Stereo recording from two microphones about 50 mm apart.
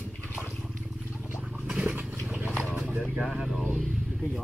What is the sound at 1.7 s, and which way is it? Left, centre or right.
Vehicle, right.